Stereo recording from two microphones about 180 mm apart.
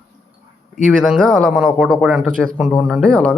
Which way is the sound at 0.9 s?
Centre (ahead or behind).